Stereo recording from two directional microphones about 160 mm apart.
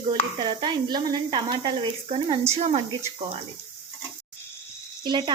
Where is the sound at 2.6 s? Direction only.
45° right (ahead or behind).